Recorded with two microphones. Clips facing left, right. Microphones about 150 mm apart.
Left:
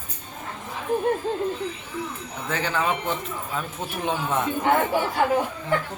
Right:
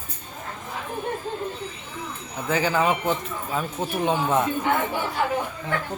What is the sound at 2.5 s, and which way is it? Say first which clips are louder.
Speech: right 4 dB; 5° right (ahead or behind).